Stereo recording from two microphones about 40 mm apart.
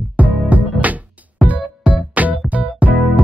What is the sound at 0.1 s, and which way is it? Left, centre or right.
Music, right.